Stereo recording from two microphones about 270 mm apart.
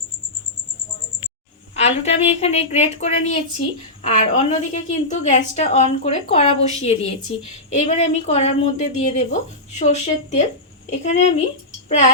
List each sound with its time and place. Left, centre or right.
1.7 s a woman's voice: left